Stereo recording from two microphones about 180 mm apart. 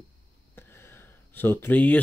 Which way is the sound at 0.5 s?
15° left (ahead or behind).